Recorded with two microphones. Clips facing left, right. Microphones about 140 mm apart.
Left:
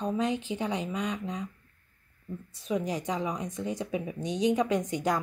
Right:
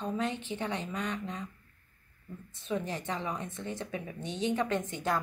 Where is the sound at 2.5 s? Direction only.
10° left (ahead or behind).